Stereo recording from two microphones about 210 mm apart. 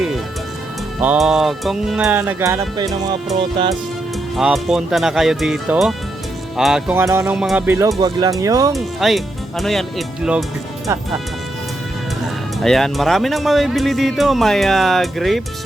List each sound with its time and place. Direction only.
1.0 s speech: 5° right (ahead or behind); by 3.8 s 25° right (ahead or behind)
4.4 s speech: centre (ahead or behind)
8.7 s speech: centre (ahead or behind)
12.2 s speech: centre (ahead or behind)